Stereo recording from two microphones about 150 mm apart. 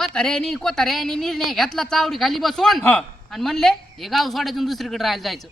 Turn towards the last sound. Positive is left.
turn(degrees=0)  # may be behind; listen again after turning